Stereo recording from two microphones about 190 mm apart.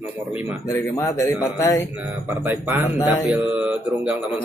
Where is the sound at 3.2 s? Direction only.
5° right (ahead or behind).